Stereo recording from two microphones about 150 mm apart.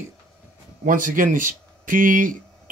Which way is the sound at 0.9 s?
60° right (ahead or behind).